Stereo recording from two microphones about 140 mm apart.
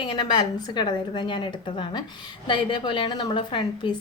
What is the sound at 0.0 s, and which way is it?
A woman's voice, 35° left (ahead or behind).